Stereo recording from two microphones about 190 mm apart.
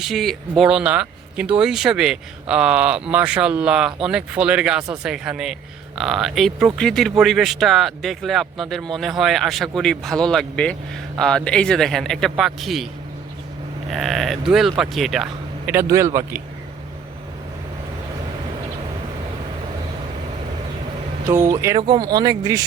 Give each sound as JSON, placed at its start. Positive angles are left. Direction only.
{"t": 0.0, "sound": "speech", "side_deg": 0}
{"t": 13.9, "sound": "speech", "side_deg": 0}
{"t": 15.7, "sound": "speech", "side_deg": -15}
{"t": 21.2, "sound": "speech", "side_deg": -15}